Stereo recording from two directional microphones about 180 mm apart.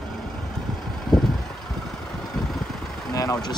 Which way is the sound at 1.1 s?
5° left (ahead or behind).